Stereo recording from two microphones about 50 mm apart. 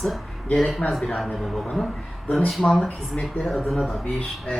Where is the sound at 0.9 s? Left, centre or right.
Centre.